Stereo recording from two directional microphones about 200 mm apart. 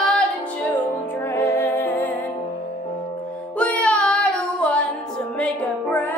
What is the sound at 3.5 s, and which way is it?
Music, 5° left (ahead or behind).